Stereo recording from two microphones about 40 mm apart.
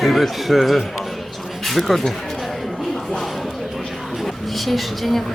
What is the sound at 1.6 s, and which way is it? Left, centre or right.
Speech, centre.